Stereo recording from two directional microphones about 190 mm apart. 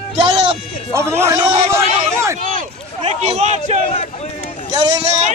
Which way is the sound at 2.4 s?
40° right (ahead or behind).